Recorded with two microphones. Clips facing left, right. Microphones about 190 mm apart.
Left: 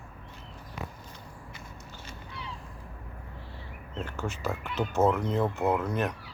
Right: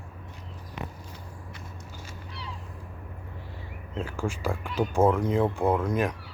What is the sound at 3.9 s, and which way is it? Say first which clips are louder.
Speech: right 4 dB; 10° right (ahead or behind).